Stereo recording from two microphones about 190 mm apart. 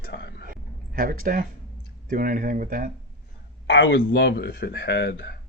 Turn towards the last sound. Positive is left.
turn(degrees=60)  # may be behind; listen again after turning